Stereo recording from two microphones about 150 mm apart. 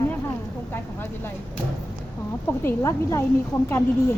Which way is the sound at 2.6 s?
20° left (ahead or behind).